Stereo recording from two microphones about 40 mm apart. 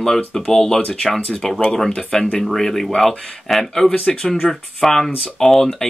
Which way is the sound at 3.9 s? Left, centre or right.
Centre.